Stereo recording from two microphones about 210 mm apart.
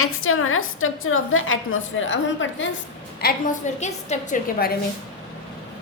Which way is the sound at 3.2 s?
45° left (ahead or behind).